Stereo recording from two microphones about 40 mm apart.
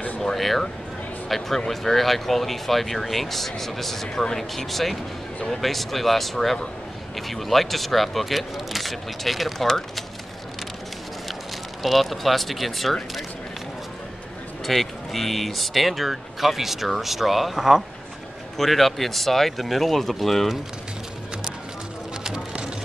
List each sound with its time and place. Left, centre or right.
0.2 s speech: centre
11.8 s speech: centre
14.7 s speech: centre
22.2 s music: centre